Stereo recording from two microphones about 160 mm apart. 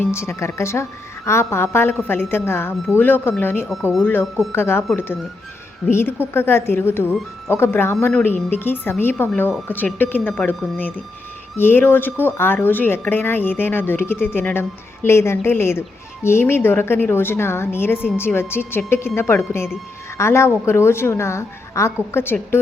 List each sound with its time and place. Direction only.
0.0 s speech: 15° left (ahead or behind)
5.9 s speech: 15° left (ahead or behind)